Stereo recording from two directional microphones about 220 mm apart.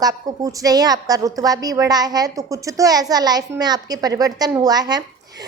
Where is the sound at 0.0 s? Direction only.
15° right (ahead or behind).